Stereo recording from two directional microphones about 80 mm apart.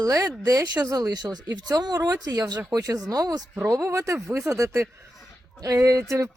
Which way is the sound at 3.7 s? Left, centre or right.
Right.